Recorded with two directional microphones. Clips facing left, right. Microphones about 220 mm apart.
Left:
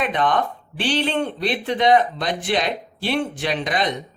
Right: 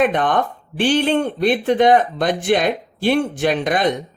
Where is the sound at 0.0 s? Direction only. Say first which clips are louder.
Right 4 dB; 50° right (ahead or behind).